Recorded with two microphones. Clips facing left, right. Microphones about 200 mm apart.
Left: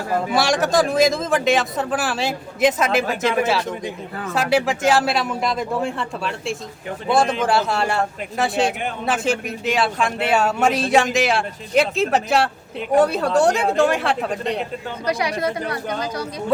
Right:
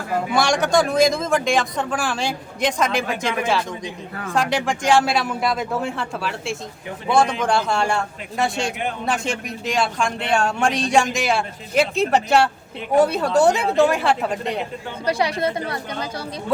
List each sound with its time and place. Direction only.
0.3 s a man's voice: centre (ahead or behind)
15.0 s a woman's voice: 30° right (ahead or behind)